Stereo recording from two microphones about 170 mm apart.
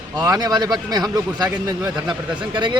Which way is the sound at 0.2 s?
25° right (ahead or behind).